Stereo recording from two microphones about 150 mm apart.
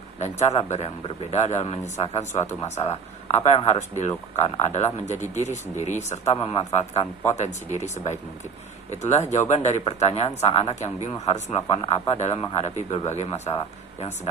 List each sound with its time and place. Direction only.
0.2 s a man's voice: 50° left (ahead or behind)
11.7 s a man's voice: 35° left (ahead or behind)